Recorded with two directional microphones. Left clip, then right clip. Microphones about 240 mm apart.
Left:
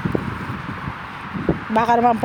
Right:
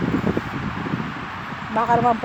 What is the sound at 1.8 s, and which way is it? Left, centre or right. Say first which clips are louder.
Speech: left 2 dB; left.